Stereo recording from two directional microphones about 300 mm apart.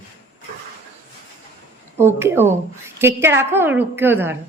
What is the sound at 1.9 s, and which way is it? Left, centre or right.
A woman's voice, centre.